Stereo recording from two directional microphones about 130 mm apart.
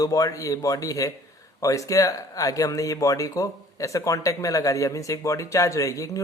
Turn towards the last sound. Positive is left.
turn(degrees=25)  # may be behind; listen again after turning